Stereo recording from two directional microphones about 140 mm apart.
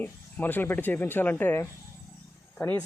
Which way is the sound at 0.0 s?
15° left (ahead or behind).